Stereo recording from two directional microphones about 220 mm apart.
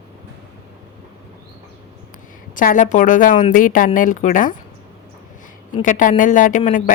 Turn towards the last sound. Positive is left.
turn(degrees=35)  # may be behind; listen again after turning